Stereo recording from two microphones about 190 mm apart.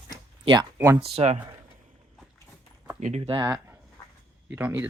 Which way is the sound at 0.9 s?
30° right (ahead or behind).